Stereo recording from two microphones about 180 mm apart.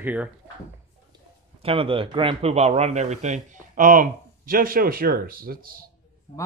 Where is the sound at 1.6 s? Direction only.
30° right (ahead or behind); by 5.8 s 55° right (ahead or behind).